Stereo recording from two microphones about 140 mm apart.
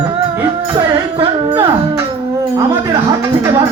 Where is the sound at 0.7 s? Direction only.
35° right (ahead or behind).